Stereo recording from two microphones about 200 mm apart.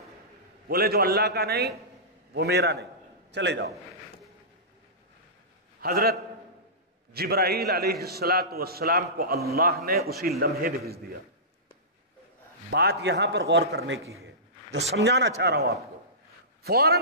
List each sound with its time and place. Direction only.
0.7 s a man's voice: 50° right (ahead or behind)
5.8 s a man's voice: 50° right (ahead or behind)
12.6 s a man's voice: 55° right (ahead or behind)